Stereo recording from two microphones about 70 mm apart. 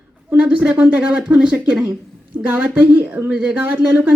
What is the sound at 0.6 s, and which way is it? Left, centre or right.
Speech, centre.